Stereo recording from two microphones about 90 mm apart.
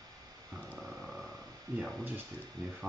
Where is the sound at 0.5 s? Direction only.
5° right (ahead or behind).